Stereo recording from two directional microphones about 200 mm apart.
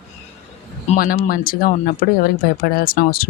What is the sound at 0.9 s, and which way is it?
Speech, 45° left (ahead or behind).